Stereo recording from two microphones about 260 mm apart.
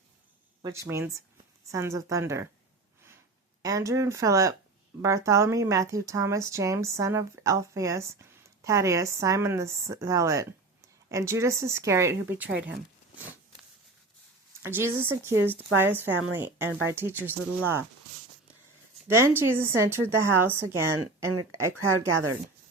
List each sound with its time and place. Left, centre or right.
0.6 s speech: centre
3.6 s speech: centre
14.6 s speech: centre
19.0 s speech: centre
21.9 s speech: right